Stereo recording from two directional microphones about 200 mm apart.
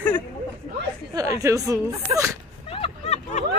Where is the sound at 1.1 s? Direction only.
15° right (ahead or behind).